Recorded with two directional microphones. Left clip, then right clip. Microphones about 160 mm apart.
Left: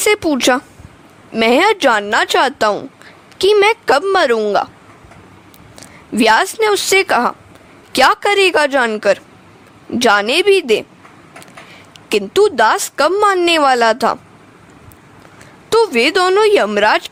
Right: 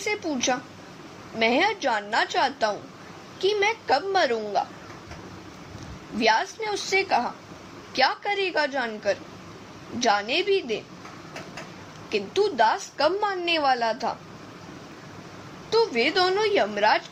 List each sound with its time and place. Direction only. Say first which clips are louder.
0.0 s a woman's voice: left 13 dB; 80° left
1.4 s a woman's voice: left 11 dB; 65° left (ahead or behind)
6.1 s a woman's voice: left 11 dB; 70° left (ahead or behind)
7.9 s a woman's voice: left 12 dB; 70° left (ahead or behind)
12.0 s speech: left 12 dB; 75° left (ahead or behind)
15.7 s a woman's voice: left 10 dB; 85° left; by 17.1 s 65° left (ahead or behind)